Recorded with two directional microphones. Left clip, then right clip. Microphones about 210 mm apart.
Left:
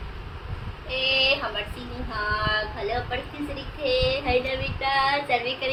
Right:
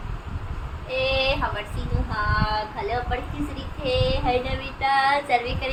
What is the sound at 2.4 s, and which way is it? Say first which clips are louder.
Child singing: even; 15° right (ahead or behind).